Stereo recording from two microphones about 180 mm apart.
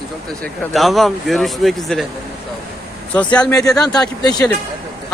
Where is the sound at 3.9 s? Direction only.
20° left (ahead or behind).